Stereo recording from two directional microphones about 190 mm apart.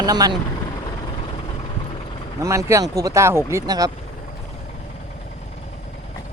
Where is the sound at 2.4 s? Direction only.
15° right (ahead or behind).